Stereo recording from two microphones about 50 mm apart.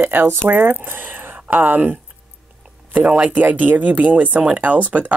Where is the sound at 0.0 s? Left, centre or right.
Right.